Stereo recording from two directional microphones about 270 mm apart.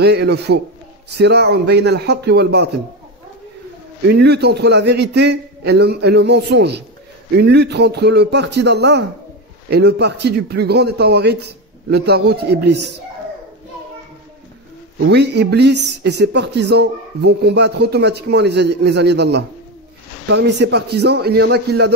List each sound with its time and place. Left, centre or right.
0.0 s speech: right
4.1 s speech: right
15.0 s speech: right